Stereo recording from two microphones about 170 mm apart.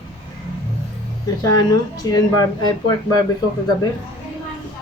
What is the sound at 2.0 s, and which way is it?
Speech, 25° left (ahead or behind).